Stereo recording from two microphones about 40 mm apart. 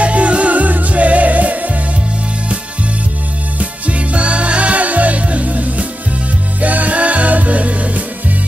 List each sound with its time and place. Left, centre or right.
0.0 s music: right
3.5 s music: right